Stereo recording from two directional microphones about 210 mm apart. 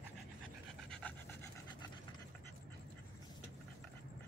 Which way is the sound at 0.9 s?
10° left (ahead or behind).